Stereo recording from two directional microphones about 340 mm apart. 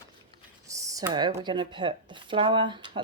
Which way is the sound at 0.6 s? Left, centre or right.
Centre.